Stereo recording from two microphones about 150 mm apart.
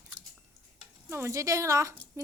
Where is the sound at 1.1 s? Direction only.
20° right (ahead or behind).